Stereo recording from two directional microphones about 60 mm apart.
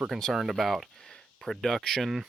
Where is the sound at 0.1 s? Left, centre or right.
Centre.